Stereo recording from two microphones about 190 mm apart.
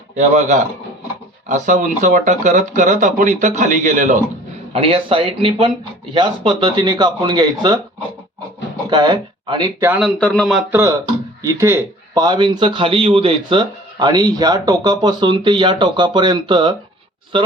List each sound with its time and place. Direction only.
0.2 s speech: 40° right (ahead or behind)
4.7 s a man's voice: 30° right (ahead or behind)
8.9 s speech: 25° right (ahead or behind)
10.2 s speech: 5° left (ahead or behind)
10.7 s a man's voice: 15° right (ahead or behind)